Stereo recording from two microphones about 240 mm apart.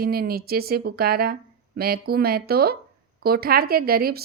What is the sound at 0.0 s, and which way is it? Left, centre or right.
Speech, right.